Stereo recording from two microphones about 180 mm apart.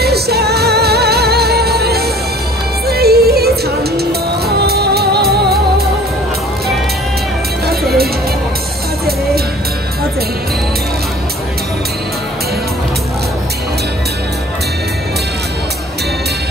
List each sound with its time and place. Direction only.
0.0 s music: 60° right (ahead or behind)